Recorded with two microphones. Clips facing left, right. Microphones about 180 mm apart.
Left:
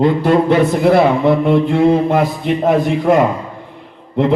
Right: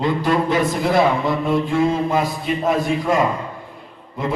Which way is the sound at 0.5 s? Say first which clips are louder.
Left 6 dB; 60° left (ahead or behind).